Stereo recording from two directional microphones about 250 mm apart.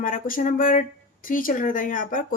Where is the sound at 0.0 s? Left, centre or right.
Left.